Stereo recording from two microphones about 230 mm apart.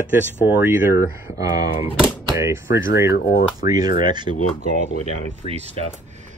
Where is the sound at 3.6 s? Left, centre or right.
Centre.